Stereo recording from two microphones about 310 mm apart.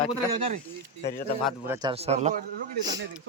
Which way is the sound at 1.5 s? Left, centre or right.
Centre.